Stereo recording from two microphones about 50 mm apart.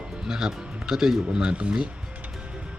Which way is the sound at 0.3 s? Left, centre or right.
Centre.